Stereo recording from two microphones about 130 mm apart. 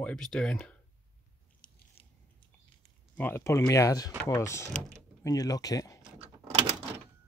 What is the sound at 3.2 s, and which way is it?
Speech, 20° left (ahead or behind).